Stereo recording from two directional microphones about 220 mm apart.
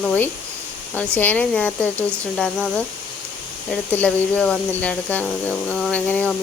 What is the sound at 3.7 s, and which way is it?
Speech, 5° left (ahead or behind).